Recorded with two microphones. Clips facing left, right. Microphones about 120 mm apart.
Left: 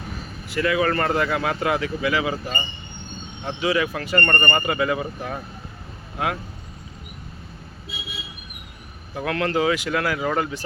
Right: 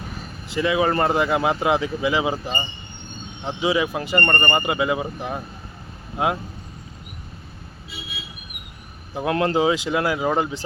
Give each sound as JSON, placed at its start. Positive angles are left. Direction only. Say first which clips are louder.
{"t": 0.4, "sound": "speech", "louder": "right 1 dB", "side_deg": -20}
{"t": 9.1, "sound": "speech", "louder": "right 3 dB", "side_deg": -25}